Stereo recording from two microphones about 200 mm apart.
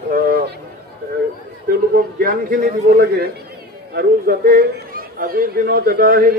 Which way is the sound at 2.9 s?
50° right (ahead or behind).